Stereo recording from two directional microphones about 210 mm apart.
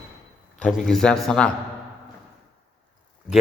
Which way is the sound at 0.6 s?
Centre (ahead or behind).